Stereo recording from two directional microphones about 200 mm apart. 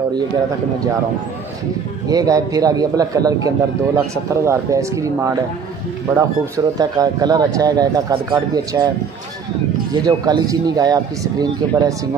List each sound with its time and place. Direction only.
2.0 s a man's voice: 15° right (ahead or behind)
10.0 s speech: 20° right (ahead or behind)